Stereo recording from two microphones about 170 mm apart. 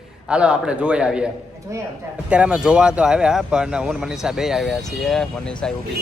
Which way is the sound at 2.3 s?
5° right (ahead or behind).